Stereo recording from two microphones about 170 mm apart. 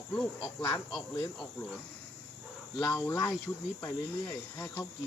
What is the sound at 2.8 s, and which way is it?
Speech, 15° left (ahead or behind).